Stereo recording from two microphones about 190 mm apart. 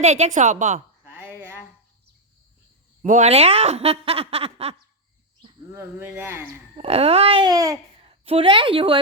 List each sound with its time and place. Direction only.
0.0 s speech: 35° right (ahead or behind)
1.0 s a sound: 10° right (ahead or behind)
3.1 s speech: 35° right (ahead or behind)
5.7 s speech: 10° right (ahead or behind)
6.7 s speech: 30° right (ahead or behind)
8.0 s a woman's voice: 30° right (ahead or behind)